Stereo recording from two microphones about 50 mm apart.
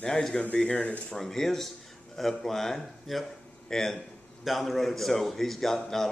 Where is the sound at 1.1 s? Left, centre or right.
Centre.